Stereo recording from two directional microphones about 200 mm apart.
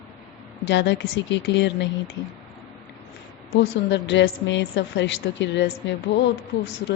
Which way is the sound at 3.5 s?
65° left (ahead or behind).